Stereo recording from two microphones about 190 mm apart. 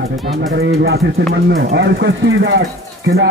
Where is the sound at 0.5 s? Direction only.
55° right (ahead or behind).